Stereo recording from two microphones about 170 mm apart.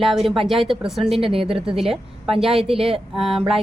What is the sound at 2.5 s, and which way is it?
Speech, 35° right (ahead or behind).